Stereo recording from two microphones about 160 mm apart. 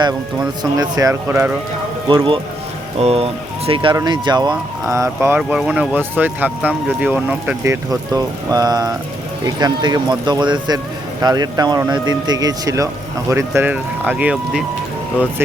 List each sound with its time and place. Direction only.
0.6 s speech: 20° right (ahead or behind)
2.0 s speech: 30° right (ahead or behind)
5.4 s speech: 5° right (ahead or behind)